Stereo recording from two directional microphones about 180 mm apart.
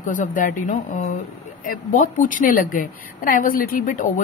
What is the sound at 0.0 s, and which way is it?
A woman's voice, 45° left (ahead or behind).